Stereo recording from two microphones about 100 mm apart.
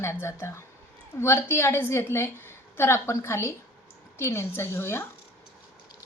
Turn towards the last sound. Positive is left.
turn(degrees=25)  # may be behind; listen again after turning